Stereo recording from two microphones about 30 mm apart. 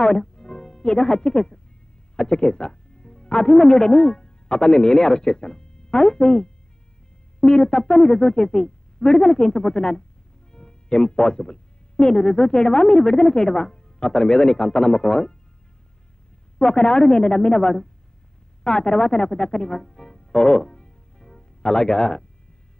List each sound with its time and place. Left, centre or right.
0.0 s a man's voice: centre
16.5 s speech: left